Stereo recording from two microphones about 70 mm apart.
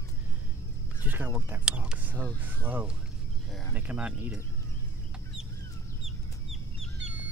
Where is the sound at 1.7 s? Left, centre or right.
Centre.